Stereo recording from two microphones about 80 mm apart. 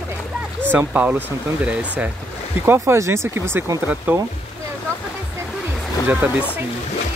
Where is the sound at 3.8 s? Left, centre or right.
Right.